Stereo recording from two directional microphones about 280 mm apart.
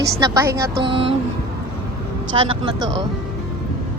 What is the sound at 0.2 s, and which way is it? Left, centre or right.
Speech, centre.